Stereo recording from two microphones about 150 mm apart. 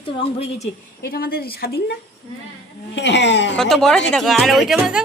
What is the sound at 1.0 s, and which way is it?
Speech, 90° left.